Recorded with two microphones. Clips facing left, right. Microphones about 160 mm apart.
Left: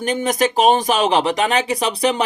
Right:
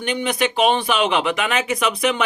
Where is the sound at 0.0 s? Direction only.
40° left (ahead or behind).